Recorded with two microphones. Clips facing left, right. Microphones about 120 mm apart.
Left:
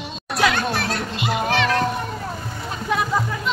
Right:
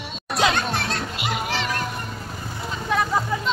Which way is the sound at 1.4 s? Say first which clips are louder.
Left 6 dB; 75° left (ahead or behind).